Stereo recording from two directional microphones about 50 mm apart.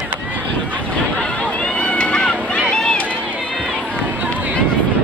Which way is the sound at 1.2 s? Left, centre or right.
Centre.